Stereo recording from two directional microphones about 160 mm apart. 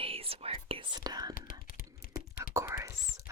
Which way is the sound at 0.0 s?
35° right (ahead or behind).